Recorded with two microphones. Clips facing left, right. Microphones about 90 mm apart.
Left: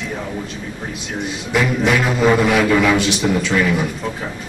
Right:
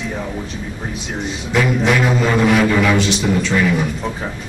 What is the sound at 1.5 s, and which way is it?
A man's voice, centre (ahead or behind).